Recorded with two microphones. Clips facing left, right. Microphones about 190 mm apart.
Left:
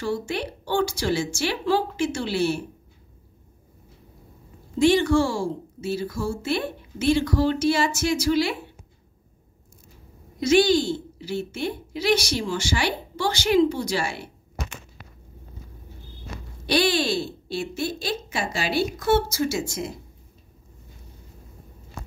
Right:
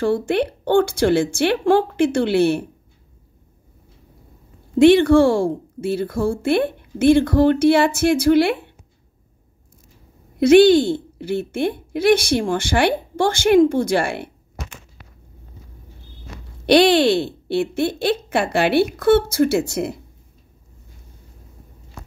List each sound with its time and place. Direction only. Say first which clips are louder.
0.0 s a woman's voice: right 8 dB; 55° right (ahead or behind)
4.7 s a woman's voice: right 7 dB; 60° right (ahead or behind)
10.4 s a woman's voice: right 8 dB; 60° right (ahead or behind)
16.6 s a woman's voice: right 9 dB; 65° right (ahead or behind)